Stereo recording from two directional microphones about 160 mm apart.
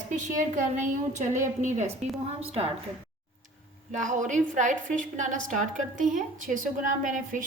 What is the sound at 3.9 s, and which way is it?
Speech, 50° right (ahead or behind).